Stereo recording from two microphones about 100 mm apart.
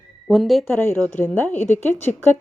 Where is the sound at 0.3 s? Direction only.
Centre (ahead or behind).